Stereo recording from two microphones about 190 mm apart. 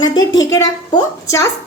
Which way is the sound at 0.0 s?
20° left (ahead or behind).